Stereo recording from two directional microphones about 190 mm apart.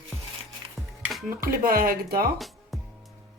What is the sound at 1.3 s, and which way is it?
Speech, 50° right (ahead or behind).